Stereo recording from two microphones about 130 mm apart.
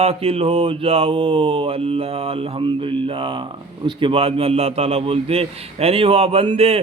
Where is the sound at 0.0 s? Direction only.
50° right (ahead or behind).